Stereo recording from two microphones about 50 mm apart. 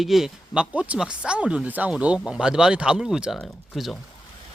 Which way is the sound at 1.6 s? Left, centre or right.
Right.